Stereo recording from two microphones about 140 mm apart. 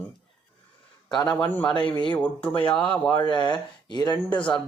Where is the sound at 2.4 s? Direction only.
40° left (ahead or behind).